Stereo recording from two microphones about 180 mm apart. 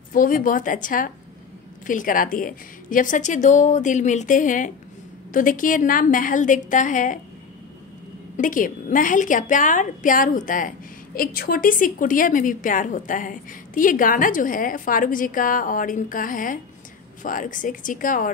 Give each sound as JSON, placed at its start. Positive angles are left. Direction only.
{"t": 0.1, "sound": "a woman's voice", "side_deg": 50}
{"t": 8.4, "sound": "a woman's voice", "side_deg": 50}